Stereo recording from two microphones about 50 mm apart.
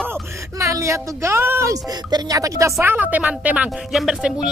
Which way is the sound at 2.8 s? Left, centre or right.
Right.